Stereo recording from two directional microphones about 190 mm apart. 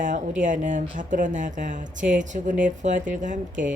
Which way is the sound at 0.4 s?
40° right (ahead or behind).